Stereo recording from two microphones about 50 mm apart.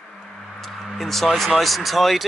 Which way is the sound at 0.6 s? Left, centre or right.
Centre.